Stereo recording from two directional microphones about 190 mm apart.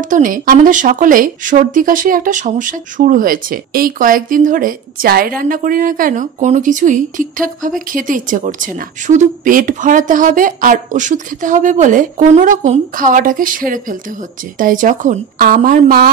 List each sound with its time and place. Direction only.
0.0 s speech: 45° right (ahead or behind)